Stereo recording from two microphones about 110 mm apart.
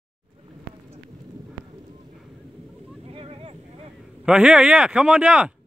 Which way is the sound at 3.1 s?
60° right (ahead or behind).